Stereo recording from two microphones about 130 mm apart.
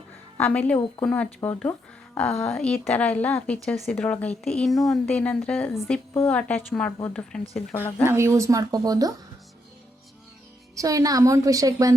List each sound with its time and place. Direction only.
0.3 s a woman's voice: 10° left (ahead or behind)
5.0 s a woman's voice: 10° left (ahead or behind)
8.0 s a woman's voice: 20° right (ahead or behind)
10.8 s a woman's voice: 25° right (ahead or behind)